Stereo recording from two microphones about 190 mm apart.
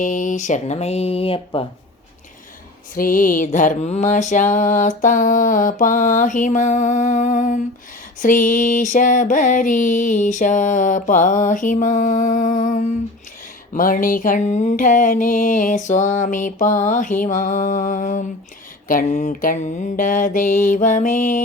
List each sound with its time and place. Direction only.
0.0 s speech: 40° left (ahead or behind)
2.9 s mantra: 45° left (ahead or behind)